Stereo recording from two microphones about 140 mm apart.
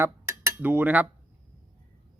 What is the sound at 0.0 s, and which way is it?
Cutlery, 20° right (ahead or behind).